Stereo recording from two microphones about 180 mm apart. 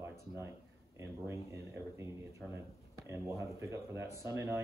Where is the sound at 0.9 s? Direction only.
15° right (ahead or behind).